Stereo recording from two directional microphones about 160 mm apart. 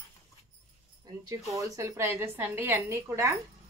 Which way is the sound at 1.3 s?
20° right (ahead or behind).